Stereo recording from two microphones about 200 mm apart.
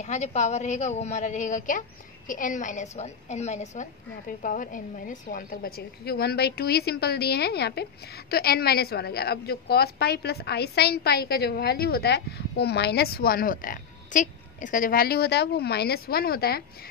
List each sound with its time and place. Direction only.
0.0 s a woman's voice: 35° left (ahead or behind); by 16.6 s 50° left (ahead or behind)